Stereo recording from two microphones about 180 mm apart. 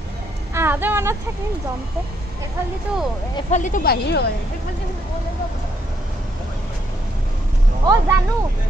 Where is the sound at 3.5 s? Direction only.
45° left (ahead or behind).